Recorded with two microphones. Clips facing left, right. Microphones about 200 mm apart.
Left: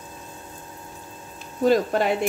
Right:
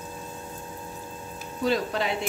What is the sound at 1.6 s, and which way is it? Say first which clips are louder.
Speech: left 6 dB; 50° left (ahead or behind).